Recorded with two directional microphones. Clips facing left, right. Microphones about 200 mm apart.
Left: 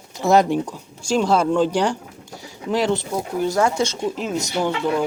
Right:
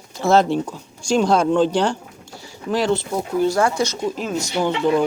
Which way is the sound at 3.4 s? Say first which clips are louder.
Even; 20° left (ahead or behind).